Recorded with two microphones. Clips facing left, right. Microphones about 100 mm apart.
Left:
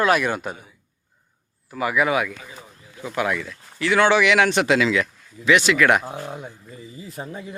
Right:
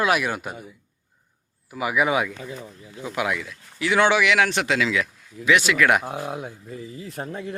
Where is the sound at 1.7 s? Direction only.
15° right (ahead or behind).